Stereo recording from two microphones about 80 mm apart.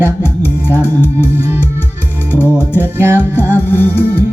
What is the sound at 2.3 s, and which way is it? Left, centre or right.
Music, left.